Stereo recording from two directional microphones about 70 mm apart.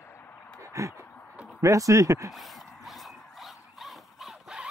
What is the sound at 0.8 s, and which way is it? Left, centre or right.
Speech, right.